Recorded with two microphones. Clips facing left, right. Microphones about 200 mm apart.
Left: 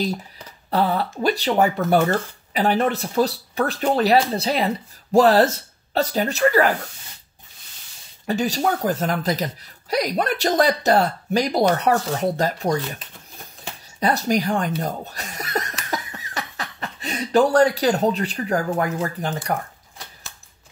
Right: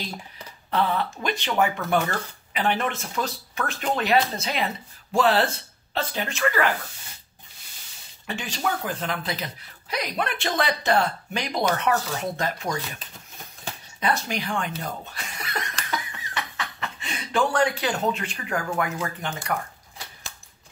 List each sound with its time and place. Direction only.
0.7 s speech: 40° left (ahead or behind)
8.3 s speech: 40° left (ahead or behind)
13.9 s speech: 40° left (ahead or behind)